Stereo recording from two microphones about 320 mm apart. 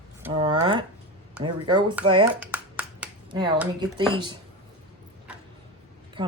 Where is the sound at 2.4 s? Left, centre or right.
Centre.